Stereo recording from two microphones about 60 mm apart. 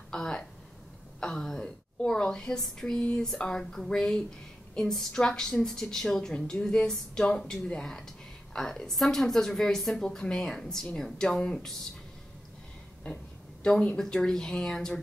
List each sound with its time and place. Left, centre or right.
0.1 s a woman's voice: centre
13.0 s speech: centre